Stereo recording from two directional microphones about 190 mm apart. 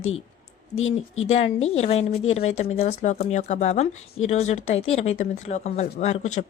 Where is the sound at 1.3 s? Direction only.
35° left (ahead or behind).